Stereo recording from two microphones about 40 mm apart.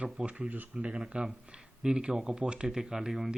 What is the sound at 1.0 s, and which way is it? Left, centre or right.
Speech, right.